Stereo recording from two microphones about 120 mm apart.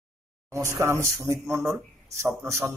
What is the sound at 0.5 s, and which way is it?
A man's voice, 25° right (ahead or behind).